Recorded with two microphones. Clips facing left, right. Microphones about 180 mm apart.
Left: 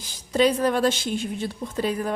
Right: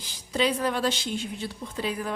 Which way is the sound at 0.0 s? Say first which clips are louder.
Left 6 dB; 45° left (ahead or behind).